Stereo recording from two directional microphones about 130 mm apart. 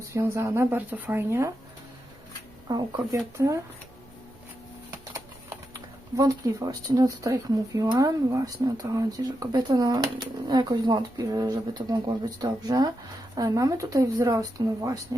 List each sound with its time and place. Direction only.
0.1 s speech: 20° right (ahead or behind)
2.7 s speech: 30° right (ahead or behind)
4.9 s speech: 25° right (ahead or behind)